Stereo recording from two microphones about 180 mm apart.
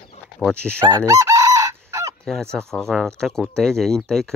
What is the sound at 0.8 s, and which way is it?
Chicken, 15° right (ahead or behind).